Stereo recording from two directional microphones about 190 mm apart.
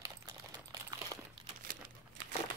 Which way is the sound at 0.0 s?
20° right (ahead or behind).